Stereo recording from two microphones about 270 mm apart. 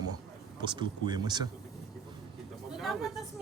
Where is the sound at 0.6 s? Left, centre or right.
Centre.